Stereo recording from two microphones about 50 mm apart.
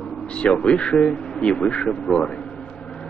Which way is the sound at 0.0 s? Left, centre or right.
Centre.